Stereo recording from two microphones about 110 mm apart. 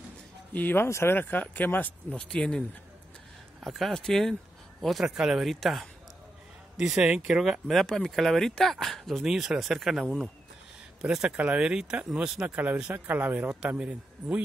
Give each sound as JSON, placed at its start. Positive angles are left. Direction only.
{"t": 0.5, "sound": "speech", "side_deg": 15}
{"t": 3.6, "sound": "speech", "side_deg": 0}